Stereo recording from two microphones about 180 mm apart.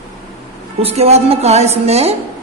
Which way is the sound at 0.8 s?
35° right (ahead or behind).